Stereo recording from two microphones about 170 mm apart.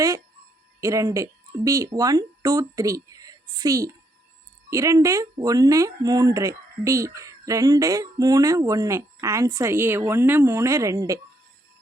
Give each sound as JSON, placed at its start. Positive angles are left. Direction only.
{"t": 0.8, "sound": "speech", "side_deg": -20}